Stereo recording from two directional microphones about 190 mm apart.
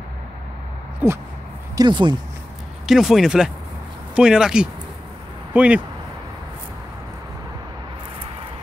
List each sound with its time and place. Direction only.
1.0 s a sound: 10° right (ahead or behind)
1.8 s speech: 25° right (ahead or behind)
2.9 s speech: centre (ahead or behind)